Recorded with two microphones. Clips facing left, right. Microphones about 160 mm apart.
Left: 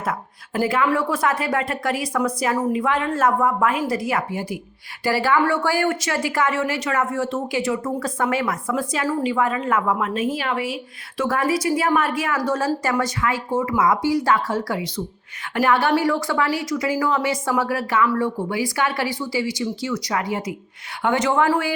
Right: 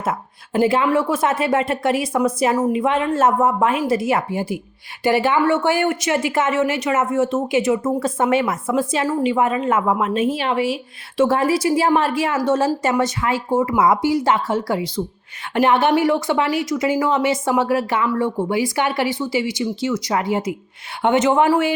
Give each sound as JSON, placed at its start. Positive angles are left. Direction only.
{"t": 0.0, "sound": "speech", "side_deg": -25}